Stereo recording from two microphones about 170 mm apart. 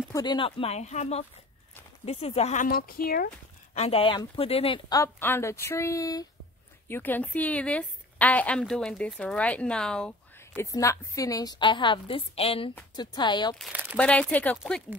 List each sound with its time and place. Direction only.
0.1 s speech: 25° left (ahead or behind); by 3.3 s 60° left (ahead or behind)
3.7 s a woman's voice: 35° left (ahead or behind); by 10.4 s 5° left (ahead or behind)
10.4 s speech: 15° left (ahead or behind)
13.6 s speech: 10° right (ahead or behind)
13.9 s a woman's voice: 10° left (ahead or behind)